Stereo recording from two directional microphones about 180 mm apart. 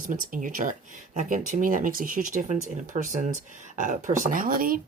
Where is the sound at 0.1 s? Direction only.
50° right (ahead or behind).